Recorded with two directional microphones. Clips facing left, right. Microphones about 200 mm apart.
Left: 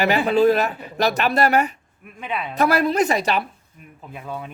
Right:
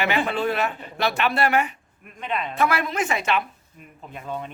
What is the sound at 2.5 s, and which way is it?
Speech, 35° left (ahead or behind).